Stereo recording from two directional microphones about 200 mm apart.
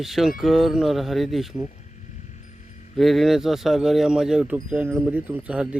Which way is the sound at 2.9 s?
Centre (ahead or behind).